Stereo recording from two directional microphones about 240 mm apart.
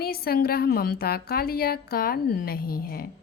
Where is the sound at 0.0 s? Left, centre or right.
Left.